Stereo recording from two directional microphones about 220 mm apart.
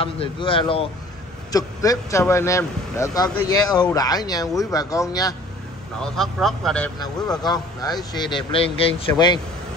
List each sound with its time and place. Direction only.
0.0 s speech: 25° left (ahead or behind)
5.9 s speech: centre (ahead or behind)
7.0 s speech: 20° left (ahead or behind)